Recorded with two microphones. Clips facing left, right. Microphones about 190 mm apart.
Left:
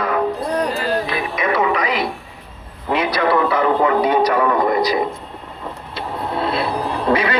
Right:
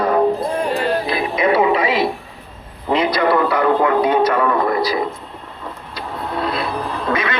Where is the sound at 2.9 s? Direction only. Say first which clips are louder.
Right 1 dB; 15° right (ahead or behind).